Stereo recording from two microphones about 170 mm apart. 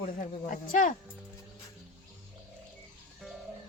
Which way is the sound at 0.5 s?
50° left (ahead or behind).